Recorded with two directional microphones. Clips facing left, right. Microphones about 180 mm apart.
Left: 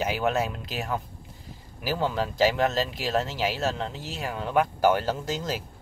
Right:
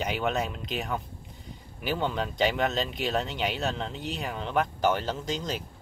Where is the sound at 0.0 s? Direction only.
5° left (ahead or behind).